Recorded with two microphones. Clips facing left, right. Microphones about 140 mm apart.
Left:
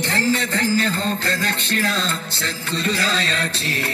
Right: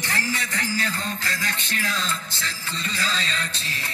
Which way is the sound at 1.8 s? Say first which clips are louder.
Left 5 dB; 75° left (ahead or behind).